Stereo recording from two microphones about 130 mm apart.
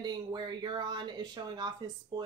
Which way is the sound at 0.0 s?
35° right (ahead or behind).